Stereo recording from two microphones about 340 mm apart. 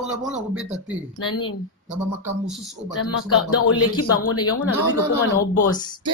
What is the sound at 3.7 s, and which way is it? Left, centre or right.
Speech, left.